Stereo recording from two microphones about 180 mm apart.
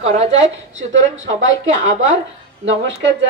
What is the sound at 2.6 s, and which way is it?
Speech, 90° right.